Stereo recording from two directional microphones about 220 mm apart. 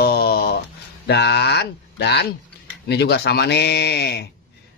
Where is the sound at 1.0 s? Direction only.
50° left (ahead or behind).